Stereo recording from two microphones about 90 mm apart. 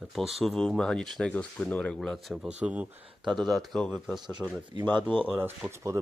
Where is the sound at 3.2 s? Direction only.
Centre (ahead or behind).